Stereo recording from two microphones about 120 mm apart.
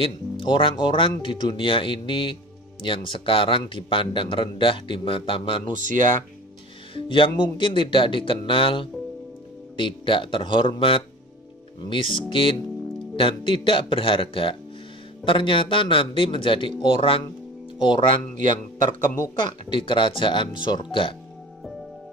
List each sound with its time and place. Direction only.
0.0 s a man's voice: 45° left (ahead or behind)
5.7 s speech: 90° right
6.9 s a man's voice: 45° left (ahead or behind)
19.7 s a man's voice: 45° left (ahead or behind)